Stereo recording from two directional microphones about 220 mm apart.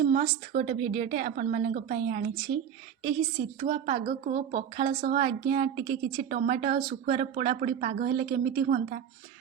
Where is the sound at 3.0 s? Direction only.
25° right (ahead or behind); by 7.1 s 40° right (ahead or behind).